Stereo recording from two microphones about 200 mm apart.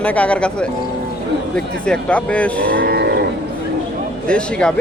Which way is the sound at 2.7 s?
50° right (ahead or behind).